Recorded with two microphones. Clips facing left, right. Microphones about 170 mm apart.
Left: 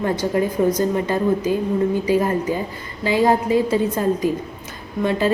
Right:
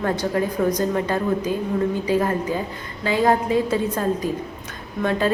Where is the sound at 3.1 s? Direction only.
10° left (ahead or behind).